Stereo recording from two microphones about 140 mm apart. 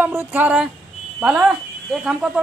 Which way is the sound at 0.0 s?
15° right (ahead or behind).